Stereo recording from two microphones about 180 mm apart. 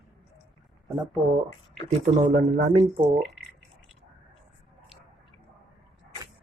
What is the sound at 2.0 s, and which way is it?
Speech, 40° right (ahead or behind).